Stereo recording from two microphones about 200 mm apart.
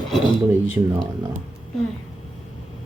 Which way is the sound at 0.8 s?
20° right (ahead or behind).